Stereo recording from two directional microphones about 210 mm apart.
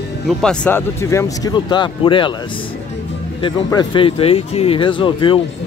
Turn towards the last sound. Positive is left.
turn(degrees=25)  # may be behind; listen again after turning